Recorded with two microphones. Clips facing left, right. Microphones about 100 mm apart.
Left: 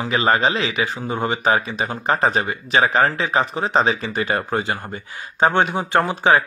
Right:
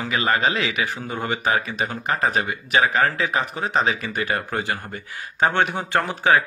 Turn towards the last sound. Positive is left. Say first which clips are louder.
# left 3 dB
turn(degrees=20)  # may be behind; listen again after turning